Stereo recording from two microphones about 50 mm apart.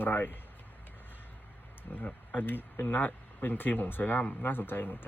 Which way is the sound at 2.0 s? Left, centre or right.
Left.